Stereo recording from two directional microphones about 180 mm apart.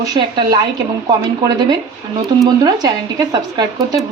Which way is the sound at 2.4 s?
20° right (ahead or behind).